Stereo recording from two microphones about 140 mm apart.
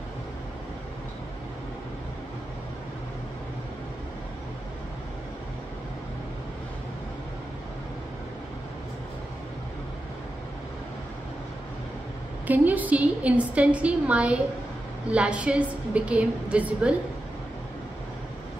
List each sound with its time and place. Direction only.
12.4 s a woman's voice: 10° right (ahead or behind)